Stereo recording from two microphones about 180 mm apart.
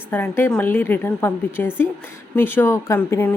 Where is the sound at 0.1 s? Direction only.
10° left (ahead or behind).